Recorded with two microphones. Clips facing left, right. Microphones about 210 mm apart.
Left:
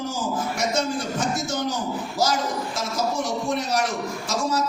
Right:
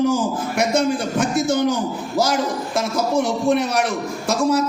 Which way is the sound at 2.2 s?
60° right (ahead or behind).